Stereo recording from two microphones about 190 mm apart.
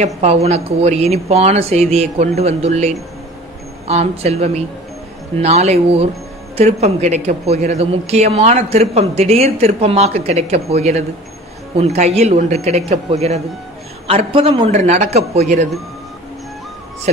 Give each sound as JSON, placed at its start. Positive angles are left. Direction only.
{"t": 0.0, "sound": "a man's voice", "side_deg": -35}